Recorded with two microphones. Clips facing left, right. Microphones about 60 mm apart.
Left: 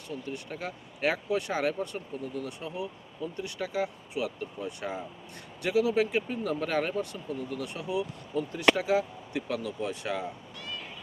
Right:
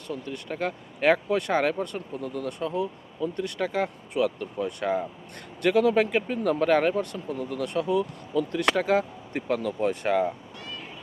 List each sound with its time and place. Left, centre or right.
0.1 s speech: right
8.3 s speech: right